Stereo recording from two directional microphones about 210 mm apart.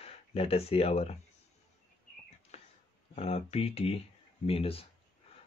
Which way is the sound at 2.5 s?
30° left (ahead or behind).